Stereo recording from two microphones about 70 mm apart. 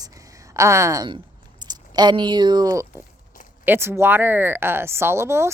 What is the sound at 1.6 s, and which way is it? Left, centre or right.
Speech, right.